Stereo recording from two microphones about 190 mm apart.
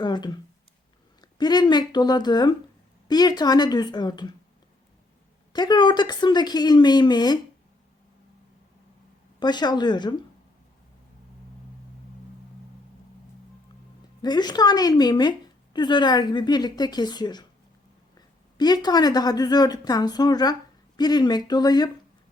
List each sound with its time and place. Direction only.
0.0 s a woman's voice: 25° left (ahead or behind)
5.5 s a woman's voice: 20° left (ahead or behind)
9.4 s a woman's voice: 20° left (ahead or behind)
14.2 s a woman's voice: 20° left (ahead or behind)
18.5 s a woman's voice: 20° left (ahead or behind)